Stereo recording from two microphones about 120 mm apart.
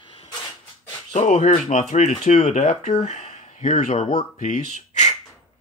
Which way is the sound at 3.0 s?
70° left (ahead or behind).